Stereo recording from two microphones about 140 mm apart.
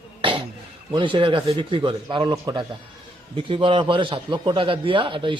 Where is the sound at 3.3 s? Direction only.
40° right (ahead or behind).